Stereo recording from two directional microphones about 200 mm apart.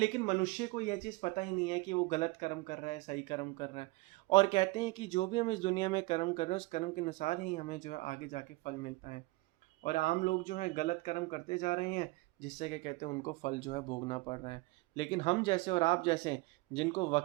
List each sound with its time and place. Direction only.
0.0 s speech: 30° left (ahead or behind)